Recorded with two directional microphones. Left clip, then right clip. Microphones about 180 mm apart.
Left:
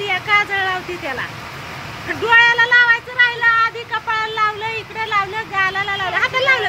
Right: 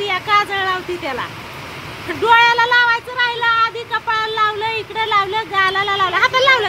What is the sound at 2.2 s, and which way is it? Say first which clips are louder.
Speech: even; 20° right (ahead or behind).